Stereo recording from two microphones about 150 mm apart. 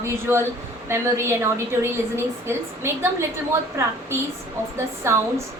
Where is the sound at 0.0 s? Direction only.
15° right (ahead or behind).